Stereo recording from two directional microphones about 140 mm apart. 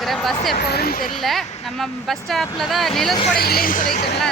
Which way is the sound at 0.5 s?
90° left.